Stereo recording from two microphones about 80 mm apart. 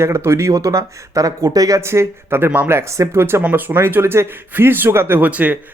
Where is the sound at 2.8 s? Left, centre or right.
Right.